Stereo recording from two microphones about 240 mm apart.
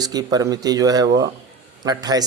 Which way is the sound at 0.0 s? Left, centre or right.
Centre.